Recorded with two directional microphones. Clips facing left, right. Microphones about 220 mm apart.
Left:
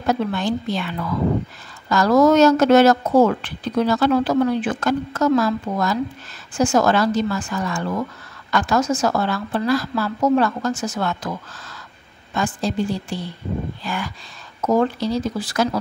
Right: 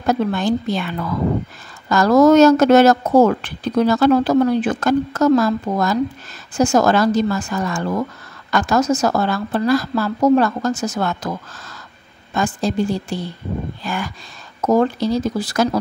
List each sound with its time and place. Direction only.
0.0 s a woman's voice: 45° right (ahead or behind)
12.4 s a woman's voice: 45° right (ahead or behind)